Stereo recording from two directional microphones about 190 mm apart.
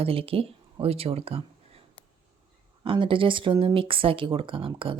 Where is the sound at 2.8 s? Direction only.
25° right (ahead or behind).